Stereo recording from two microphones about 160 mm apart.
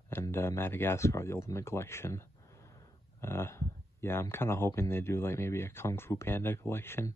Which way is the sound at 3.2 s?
15° left (ahead or behind).